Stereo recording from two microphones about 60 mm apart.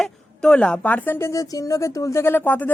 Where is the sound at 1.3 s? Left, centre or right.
Left.